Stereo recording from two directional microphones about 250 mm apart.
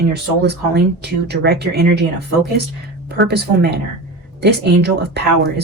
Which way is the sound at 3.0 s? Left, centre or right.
Right.